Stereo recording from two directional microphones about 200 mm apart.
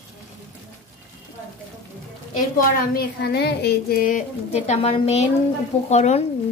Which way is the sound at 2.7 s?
50° left (ahead or behind).